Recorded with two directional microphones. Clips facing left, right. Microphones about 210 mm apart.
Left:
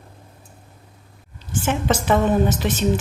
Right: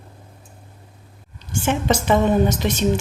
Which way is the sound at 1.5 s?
5° left (ahead or behind).